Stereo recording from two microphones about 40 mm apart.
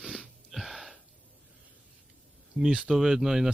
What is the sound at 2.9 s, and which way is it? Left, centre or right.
Speech, centre.